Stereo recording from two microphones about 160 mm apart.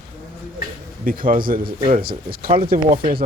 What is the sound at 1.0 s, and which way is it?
A man's voice, 60° right (ahead or behind).